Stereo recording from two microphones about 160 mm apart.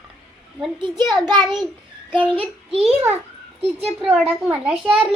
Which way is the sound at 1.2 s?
25° right (ahead or behind).